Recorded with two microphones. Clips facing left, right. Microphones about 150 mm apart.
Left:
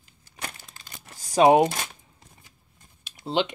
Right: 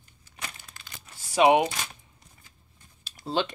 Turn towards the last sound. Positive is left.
turn(degrees=20)  # may be behind; listen again after turning